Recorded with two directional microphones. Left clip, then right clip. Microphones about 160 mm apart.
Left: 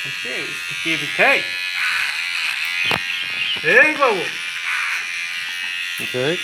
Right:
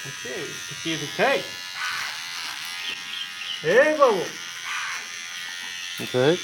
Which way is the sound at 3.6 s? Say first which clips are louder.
Left 3 dB; 25° left (ahead or behind).